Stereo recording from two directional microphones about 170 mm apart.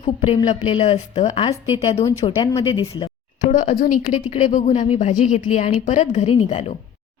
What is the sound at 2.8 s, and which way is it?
A woman's voice, 35° left (ahead or behind).